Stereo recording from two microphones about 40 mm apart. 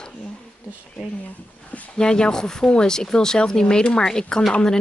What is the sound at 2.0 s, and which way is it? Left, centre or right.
Speech, centre.